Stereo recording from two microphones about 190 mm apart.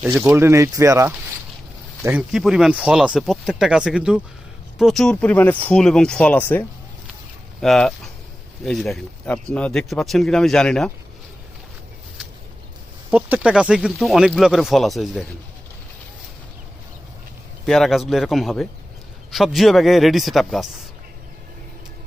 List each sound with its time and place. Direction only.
0.2 s speech: 15° right (ahead or behind)
2.0 s speech: 5° right (ahead or behind)
13.1 s speech: 10° right (ahead or behind)
17.7 s speech: centre (ahead or behind)